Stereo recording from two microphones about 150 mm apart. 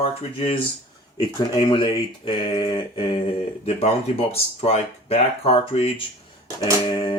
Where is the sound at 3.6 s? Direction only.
40° left (ahead or behind).